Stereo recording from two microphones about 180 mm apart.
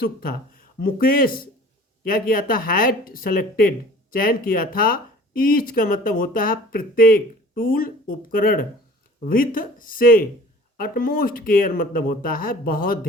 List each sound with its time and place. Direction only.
0.0 s speech: 55° left (ahead or behind)